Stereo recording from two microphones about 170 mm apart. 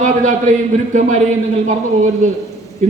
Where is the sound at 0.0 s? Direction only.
45° right (ahead or behind).